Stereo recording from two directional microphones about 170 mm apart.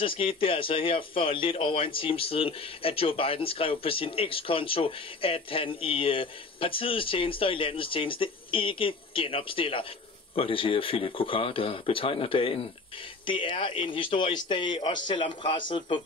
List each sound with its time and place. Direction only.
0.0 s a man's voice: 30° left (ahead or behind)